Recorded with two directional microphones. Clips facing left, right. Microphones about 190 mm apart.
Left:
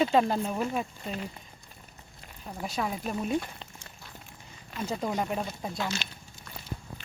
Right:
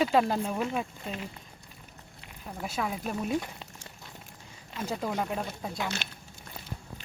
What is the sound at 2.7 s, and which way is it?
Speech, centre (ahead or behind).